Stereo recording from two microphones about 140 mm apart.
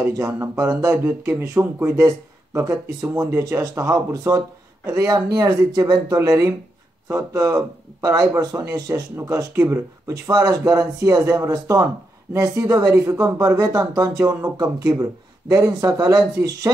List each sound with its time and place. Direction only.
0.0 s speech: 20° right (ahead or behind)